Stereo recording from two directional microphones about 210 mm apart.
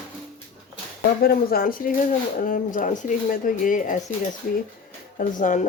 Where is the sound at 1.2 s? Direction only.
45° left (ahead or behind).